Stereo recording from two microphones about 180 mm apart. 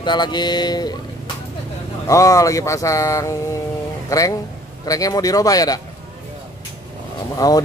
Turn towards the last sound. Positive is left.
turn(degrees=20)  # may be behind; listen again after turning